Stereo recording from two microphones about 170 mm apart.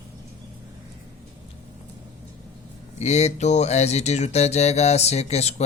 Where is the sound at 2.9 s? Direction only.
40° left (ahead or behind).